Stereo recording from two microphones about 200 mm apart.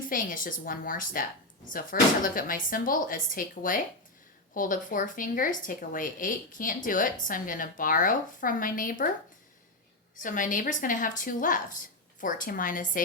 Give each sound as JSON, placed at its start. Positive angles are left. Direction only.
{"t": 0.0, "sound": "speech", "side_deg": 45}
{"t": 10.2, "sound": "a woman's voice", "side_deg": 40}